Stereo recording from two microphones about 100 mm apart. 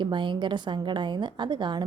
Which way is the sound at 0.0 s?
50° right (ahead or behind).